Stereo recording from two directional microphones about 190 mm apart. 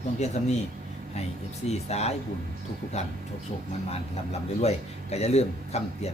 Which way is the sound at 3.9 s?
35° left (ahead or behind).